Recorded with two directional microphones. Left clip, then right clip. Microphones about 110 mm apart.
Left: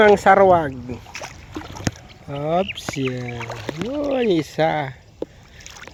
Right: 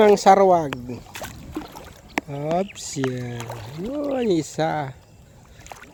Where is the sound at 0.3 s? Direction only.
20° right (ahead or behind).